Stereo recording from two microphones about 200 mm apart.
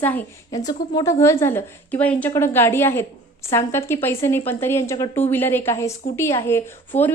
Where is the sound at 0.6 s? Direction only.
20° left (ahead or behind).